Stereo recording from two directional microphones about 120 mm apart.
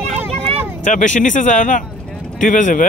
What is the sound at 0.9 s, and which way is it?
Speech, 90° left.